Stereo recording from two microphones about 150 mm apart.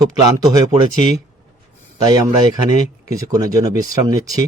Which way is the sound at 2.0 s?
25° right (ahead or behind).